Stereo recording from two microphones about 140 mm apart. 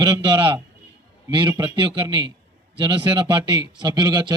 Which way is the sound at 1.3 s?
35° right (ahead or behind).